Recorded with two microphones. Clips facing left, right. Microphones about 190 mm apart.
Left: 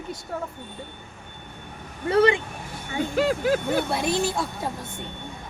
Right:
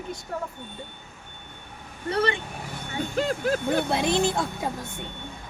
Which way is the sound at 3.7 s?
20° right (ahead or behind).